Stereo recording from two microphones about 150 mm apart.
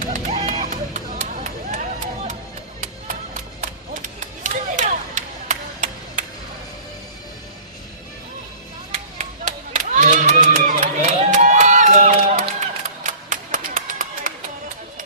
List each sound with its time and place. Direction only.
0.0 s run: 50° right (ahead or behind)
2.8 s music: 60° right (ahead or behind)
9.2 s a sound: 55° right (ahead or behind)